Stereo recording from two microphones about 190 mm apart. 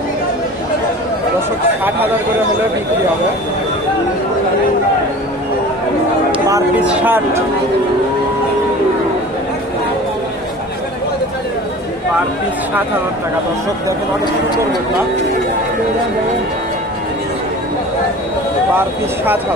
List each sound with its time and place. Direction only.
6.3 s a sound: 15° right (ahead or behind)
6.9 s speech: 10° right (ahead or behind)
18.8 s speech: 10° right (ahead or behind)